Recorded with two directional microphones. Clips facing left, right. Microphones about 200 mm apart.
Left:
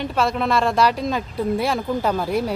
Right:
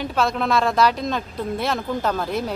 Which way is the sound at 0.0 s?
Centre (ahead or behind).